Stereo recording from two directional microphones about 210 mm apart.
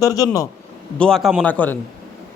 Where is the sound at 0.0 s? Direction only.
15° left (ahead or behind).